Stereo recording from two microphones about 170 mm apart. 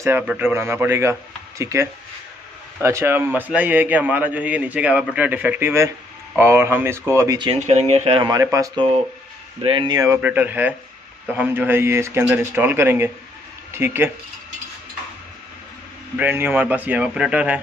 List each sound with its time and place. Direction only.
0.0 s a man's voice: 10° right (ahead or behind)
7.5 s speech: 40° right (ahead or behind)
8.3 s a man's voice: 20° right (ahead or behind)
16.2 s a man's voice: 10° right (ahead or behind)